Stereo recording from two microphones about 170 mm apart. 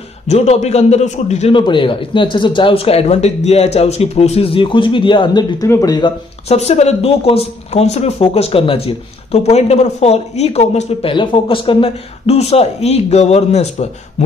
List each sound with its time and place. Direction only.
0.3 s speech: 40° left (ahead or behind)
1.5 s speech: 30° left (ahead or behind)
6.5 s speech: 40° left (ahead or behind)